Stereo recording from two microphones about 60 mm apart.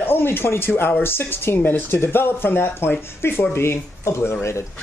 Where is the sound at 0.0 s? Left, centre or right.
Left.